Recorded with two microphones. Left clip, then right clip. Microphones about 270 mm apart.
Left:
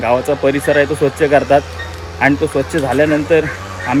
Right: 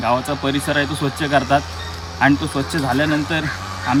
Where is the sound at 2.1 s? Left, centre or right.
Centre.